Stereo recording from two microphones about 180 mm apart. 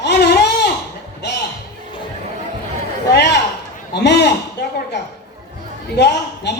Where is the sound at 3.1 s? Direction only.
70° left (ahead or behind).